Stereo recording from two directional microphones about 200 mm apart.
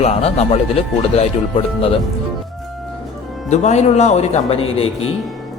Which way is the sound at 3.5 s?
35° left (ahead or behind).